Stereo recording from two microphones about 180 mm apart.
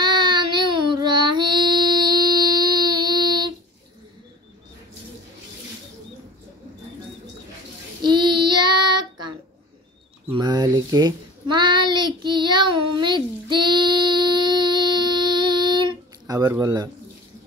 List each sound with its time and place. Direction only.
0.0 s child singing: 25° right (ahead or behind)
8.0 s child singing: 25° right (ahead or behind)
10.3 s child singing: 20° right (ahead or behind)